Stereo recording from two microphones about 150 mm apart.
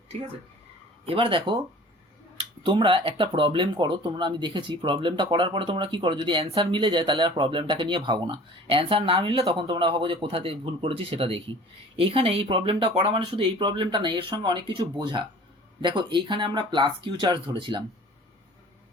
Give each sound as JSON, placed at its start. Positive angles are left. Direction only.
{"t": 1.0, "sound": "speech", "side_deg": -35}